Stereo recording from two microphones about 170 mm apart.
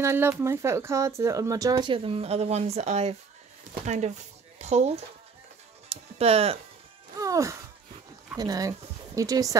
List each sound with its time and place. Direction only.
0.0 s speech: 15° right (ahead or behind); by 5.0 s 40° right (ahead or behind)
5.9 s music: 35° right (ahead or behind)
7.2 s music: 20° right (ahead or behind)
8.4 s speech: 20° right (ahead or behind)